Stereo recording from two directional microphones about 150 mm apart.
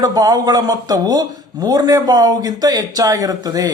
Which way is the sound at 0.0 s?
25° right (ahead or behind).